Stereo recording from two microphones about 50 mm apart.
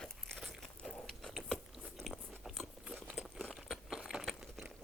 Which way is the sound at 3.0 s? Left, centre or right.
Centre.